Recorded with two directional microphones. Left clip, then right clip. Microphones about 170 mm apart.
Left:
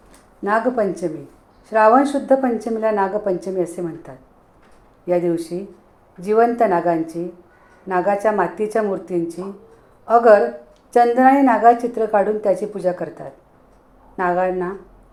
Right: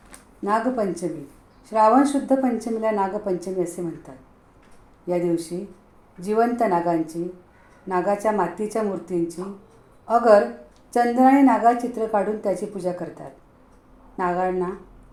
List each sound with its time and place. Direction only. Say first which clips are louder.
0.4 s a woman's voice: left 4 dB; 20° left (ahead or behind)